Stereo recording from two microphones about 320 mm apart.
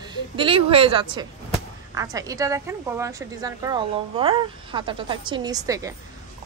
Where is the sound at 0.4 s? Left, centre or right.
Centre.